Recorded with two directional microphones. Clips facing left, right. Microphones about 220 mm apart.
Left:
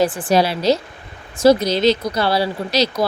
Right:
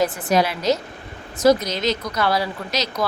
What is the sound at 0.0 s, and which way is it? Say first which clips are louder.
A woman's voice: left 3 dB; 30° left (ahead or behind).